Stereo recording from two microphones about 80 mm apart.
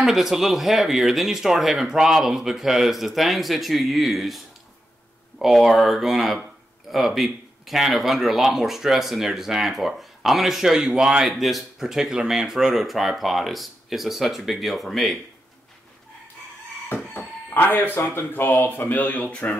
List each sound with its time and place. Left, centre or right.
0.0 s speech: centre
5.4 s speech: centre
17.6 s speech: left